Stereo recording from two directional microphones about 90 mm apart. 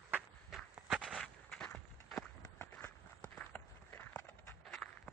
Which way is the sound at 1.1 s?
5° left (ahead or behind).